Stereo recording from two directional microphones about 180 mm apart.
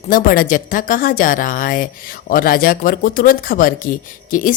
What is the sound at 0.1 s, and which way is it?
A woman's voice, 50° left (ahead or behind).